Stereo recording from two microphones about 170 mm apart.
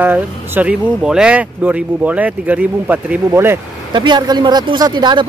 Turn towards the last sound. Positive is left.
turn(degrees=-25)  # may be behind; listen again after turning